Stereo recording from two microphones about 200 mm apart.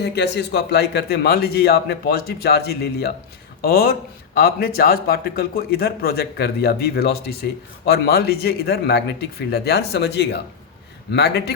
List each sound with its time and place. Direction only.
0.0 s a man's voice: 60° left (ahead or behind)